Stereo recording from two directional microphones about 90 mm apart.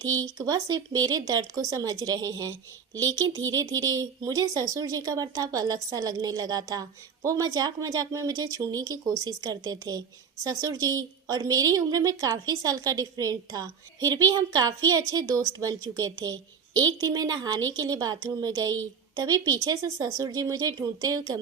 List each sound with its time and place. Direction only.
0.0 s a woman's voice: 40° right (ahead or behind)